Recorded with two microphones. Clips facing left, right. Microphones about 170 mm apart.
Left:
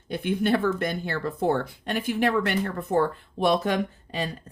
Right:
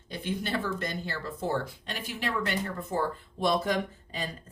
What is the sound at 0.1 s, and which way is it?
Speech, 60° left (ahead or behind).